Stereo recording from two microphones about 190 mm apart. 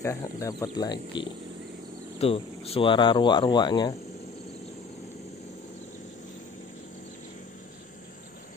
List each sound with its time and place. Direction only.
0.0 s speech: 15° left (ahead or behind)